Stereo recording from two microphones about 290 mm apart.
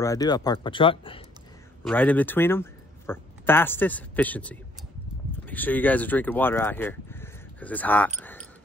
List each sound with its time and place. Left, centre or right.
0.0 s speech: centre
1.9 s speech: centre
8.2 s a sound: centre